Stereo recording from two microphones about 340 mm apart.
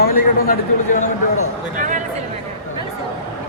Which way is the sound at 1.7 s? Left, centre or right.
Right.